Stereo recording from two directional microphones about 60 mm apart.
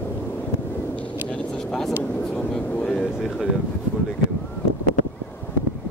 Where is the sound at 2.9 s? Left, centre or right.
Centre.